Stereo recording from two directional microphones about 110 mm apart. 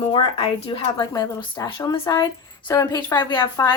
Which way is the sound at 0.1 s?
50° left (ahead or behind).